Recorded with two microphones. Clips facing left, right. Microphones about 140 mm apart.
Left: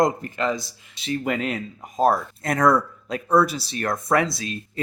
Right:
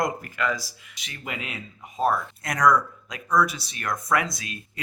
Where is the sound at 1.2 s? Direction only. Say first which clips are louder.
Left 6 dB; 45° left (ahead or behind).